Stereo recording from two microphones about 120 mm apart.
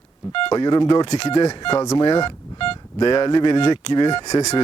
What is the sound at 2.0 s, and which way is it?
Speech, 45° left (ahead or behind).